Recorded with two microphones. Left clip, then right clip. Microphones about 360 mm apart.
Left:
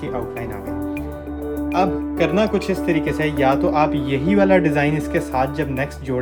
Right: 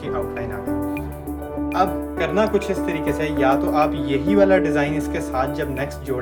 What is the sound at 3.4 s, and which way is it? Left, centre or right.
Speech, centre.